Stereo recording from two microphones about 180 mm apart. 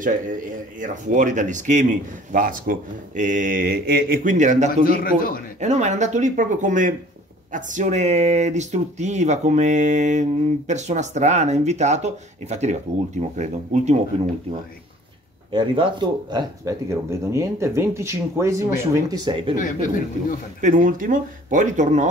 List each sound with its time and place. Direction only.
0.7 s speech: 45° right (ahead or behind)
4.8 s speech: 55° left (ahead or behind)
5.6 s speech: 40° right (ahead or behind)
15.5 s speech: 25° right (ahead or behind)
19.5 s speech: 45° left (ahead or behind)
20.6 s speech: 45° right (ahead or behind)